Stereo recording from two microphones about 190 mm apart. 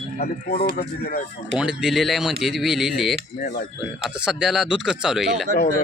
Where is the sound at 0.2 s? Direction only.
55° left (ahead or behind).